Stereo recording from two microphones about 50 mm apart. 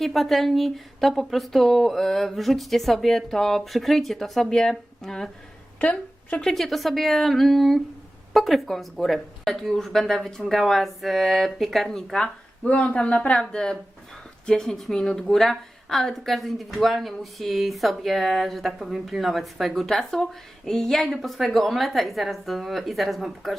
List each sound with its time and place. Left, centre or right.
0.0 s a woman's voice: centre
5.8 s a woman's voice: left
6.4 s a woman's voice: centre
12.6 s a woman's voice: left; by 23.6 s centre